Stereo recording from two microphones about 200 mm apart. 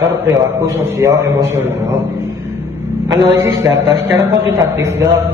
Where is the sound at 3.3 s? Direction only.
15° right (ahead or behind).